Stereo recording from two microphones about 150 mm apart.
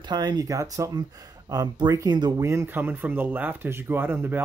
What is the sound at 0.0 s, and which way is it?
Speech, 30° right (ahead or behind).